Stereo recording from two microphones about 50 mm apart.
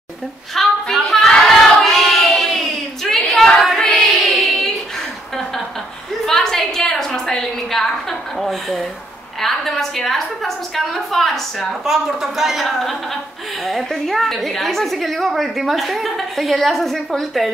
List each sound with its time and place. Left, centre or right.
0.6 s hands: centre
6.2 s a sound: centre
9.4 s a woman's voice: centre
11.8 s a woman's voice: centre